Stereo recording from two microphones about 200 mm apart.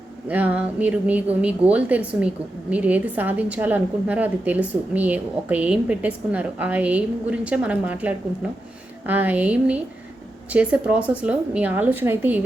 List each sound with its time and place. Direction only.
0.3 s a woman's voice: 5° right (ahead or behind)